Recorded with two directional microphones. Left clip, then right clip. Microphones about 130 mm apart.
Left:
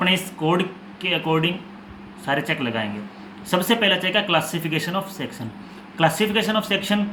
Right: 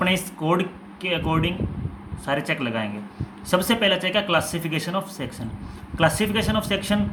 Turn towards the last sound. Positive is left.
turn(degrees=-20)  # may be behind; listen again after turning